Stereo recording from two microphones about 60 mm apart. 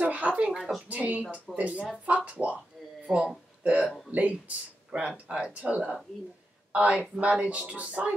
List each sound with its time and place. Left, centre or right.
0.0 s a sound: right
0.6 s speech: centre
0.8 s speech: right
3.1 s speech: centre